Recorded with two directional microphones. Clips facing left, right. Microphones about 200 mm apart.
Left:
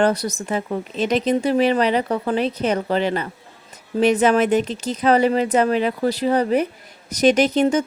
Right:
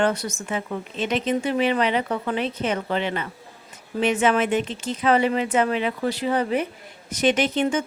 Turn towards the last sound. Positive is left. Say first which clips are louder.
# left 5 dB
turn(degrees=40)  # may be behind; listen again after turning